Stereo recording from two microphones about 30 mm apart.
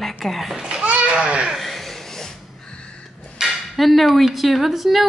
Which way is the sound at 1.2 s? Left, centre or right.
Right.